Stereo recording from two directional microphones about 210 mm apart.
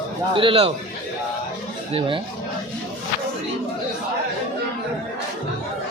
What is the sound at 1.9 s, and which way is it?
Speech, 25° right (ahead or behind).